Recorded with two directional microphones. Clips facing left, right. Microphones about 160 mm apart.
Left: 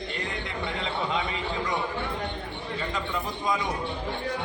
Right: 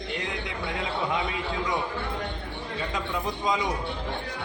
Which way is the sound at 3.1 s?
15° right (ahead or behind).